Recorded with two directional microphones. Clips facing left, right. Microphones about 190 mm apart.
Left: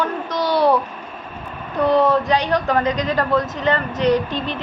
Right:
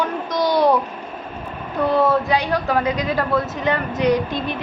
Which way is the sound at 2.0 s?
10° right (ahead or behind).